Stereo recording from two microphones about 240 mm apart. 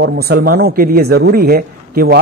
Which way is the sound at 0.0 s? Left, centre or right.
Right.